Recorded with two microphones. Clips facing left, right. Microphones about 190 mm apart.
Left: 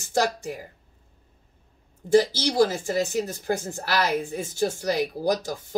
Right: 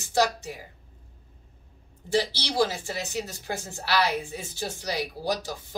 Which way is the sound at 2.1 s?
50° left (ahead or behind).